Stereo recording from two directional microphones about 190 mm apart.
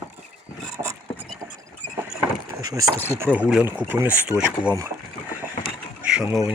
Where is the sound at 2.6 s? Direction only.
15° right (ahead or behind).